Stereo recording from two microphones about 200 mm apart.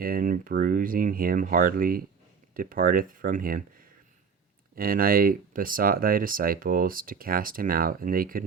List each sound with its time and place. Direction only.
0.0 s speech: 45° right (ahead or behind)